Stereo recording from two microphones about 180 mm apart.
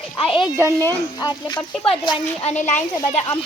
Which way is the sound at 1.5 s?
5° left (ahead or behind).